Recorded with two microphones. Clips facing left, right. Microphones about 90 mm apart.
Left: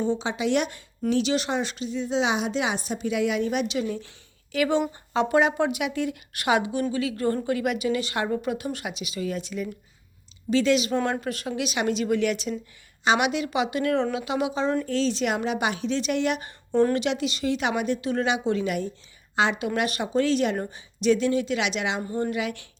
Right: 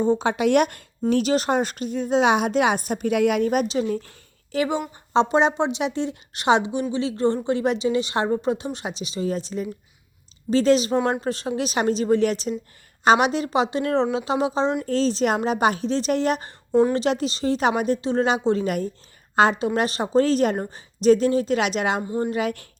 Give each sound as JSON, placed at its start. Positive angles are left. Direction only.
{"t": 0.0, "sound": "a woman's voice", "side_deg": -50}
{"t": 1.1, "sound": "a woman's voice", "side_deg": -45}
{"t": 22.0, "sound": "speech", "side_deg": -20}
{"t": 22.3, "sound": "a woman's voice", "side_deg": -40}